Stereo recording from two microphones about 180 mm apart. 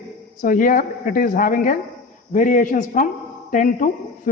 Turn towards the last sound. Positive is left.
turn(degrees=45)  # may be behind; listen again after turning